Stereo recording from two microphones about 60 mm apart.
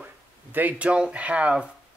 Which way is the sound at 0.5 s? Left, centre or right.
Right.